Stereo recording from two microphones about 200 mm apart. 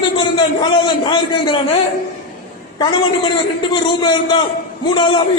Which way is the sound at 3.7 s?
25° left (ahead or behind).